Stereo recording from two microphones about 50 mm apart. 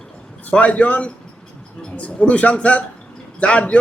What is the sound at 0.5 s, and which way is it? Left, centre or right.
A man's voice, left.